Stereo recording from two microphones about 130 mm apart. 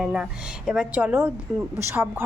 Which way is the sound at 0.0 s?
5° right (ahead or behind).